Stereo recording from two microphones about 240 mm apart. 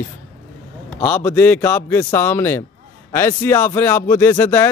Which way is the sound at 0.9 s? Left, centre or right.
Centre.